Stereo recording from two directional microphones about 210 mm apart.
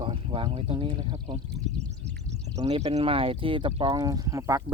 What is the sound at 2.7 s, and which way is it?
Speech, 30° right (ahead or behind).